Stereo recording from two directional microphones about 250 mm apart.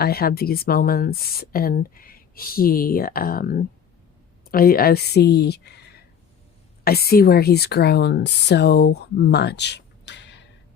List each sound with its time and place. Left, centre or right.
0.0 s speech: left